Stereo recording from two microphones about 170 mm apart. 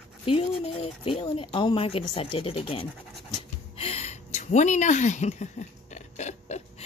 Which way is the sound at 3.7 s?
35° left (ahead or behind).